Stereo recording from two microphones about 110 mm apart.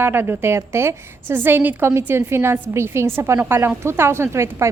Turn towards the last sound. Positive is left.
turn(degrees=-25)  # may be behind; listen again after turning